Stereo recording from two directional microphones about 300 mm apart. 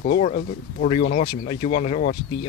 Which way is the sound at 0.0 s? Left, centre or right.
Left.